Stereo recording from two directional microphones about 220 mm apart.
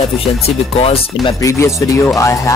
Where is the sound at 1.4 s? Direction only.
15° left (ahead or behind).